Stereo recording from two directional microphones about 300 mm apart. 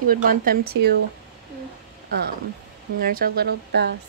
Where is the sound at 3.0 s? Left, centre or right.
Right.